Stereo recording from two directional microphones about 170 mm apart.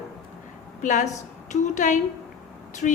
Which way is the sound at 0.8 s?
45° left (ahead or behind).